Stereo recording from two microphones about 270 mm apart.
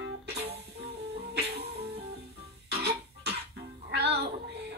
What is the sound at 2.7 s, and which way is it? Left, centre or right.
Cough, right.